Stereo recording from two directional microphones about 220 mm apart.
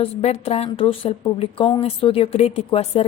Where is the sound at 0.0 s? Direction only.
30° left (ahead or behind).